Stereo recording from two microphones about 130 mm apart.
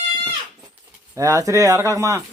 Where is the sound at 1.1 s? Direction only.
25° right (ahead or behind).